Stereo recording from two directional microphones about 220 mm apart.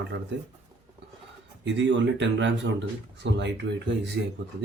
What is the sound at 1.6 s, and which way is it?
Speech, 55° right (ahead or behind).